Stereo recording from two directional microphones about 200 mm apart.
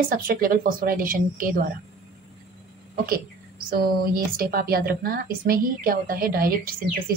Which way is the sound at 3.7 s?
45° right (ahead or behind).